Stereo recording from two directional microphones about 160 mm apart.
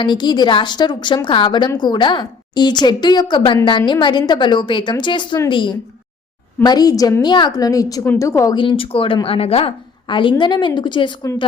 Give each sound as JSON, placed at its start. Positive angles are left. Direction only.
{"t": 0.0, "sound": "a woman's voice", "side_deg": 30}